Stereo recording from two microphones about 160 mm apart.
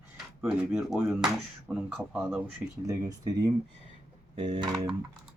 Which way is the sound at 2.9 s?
20° right (ahead or behind).